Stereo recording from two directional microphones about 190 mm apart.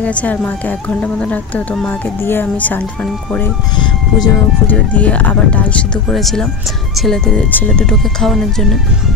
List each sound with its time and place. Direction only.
0.0 s speech: 5° left (ahead or behind)
3.7 s speech: 25° left (ahead or behind)
4.6 s speech: 10° left (ahead or behind)